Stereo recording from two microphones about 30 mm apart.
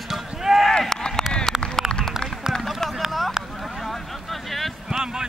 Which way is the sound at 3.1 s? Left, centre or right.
Centre.